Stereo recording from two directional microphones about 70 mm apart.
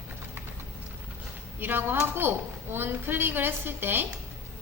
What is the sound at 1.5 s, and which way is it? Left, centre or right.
A woman's voice, right.